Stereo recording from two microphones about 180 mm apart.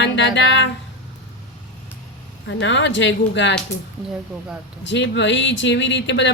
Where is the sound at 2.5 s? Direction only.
90° left.